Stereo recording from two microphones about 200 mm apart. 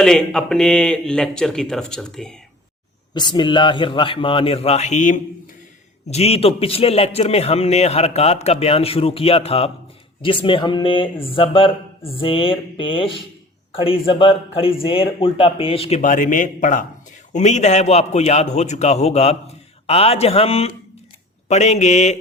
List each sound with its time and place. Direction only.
0.0 s a man's voice: 5° left (ahead or behind)
3.2 s a man's voice: 20° left (ahead or behind)
16.0 s a man's voice: 40° left (ahead or behind)